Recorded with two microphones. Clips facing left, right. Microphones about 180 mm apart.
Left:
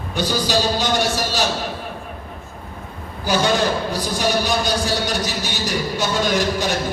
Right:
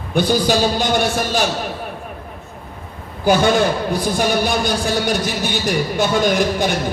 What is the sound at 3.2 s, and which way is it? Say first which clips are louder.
A man's voice: right 4 dB; 55° right (ahead or behind).